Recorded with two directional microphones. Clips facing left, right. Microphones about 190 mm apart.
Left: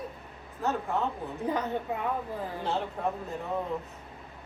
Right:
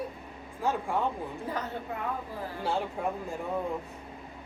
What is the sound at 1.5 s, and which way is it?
Speech, 20° left (ahead or behind).